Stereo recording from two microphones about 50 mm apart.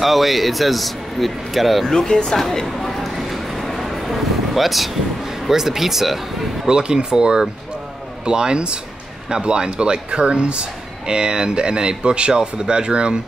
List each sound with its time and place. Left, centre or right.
0.0 s speech: centre
1.9 s speech: centre
2.3 s a sound: centre
4.6 s speech: centre
6.6 s speech: centre